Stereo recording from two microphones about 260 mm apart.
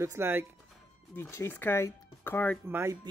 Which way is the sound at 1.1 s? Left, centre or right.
Centre.